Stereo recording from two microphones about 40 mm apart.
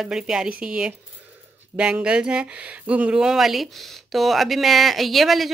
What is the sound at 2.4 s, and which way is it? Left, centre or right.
Speech, right.